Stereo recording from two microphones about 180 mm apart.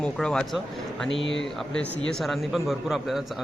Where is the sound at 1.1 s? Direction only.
90° left.